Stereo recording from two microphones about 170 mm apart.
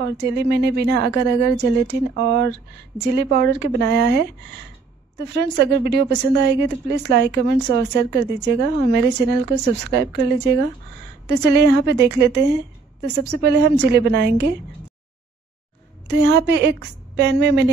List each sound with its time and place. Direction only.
0.0 s a woman's voice: 80° right
16.1 s a woman's voice: 85° right